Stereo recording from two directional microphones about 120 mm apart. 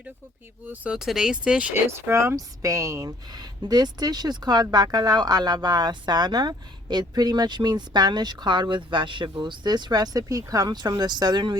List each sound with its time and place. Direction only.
0.7 s speech: 5° right (ahead or behind)
1.9 s speech: 20° right (ahead or behind); by 11.5 s 35° right (ahead or behind)